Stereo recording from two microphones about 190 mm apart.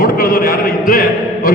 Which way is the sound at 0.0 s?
50° left (ahead or behind).